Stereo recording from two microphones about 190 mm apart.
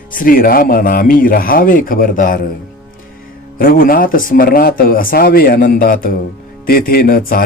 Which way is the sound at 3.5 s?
50° left (ahead or behind).